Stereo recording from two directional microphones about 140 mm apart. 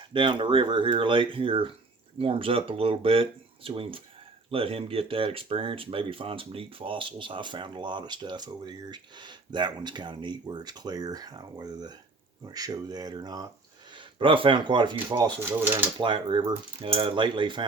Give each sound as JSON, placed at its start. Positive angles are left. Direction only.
{"t": 0.1, "sound": "speech", "side_deg": -35}
{"t": 15.4, "sound": "speech", "side_deg": -15}
{"t": 16.0, "sound": "speech", "side_deg": -35}